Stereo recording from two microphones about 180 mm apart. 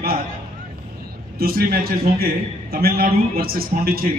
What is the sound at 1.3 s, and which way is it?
A man's voice, 55° right (ahead or behind).